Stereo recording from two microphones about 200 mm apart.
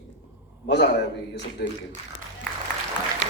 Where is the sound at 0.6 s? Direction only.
60° left (ahead or behind).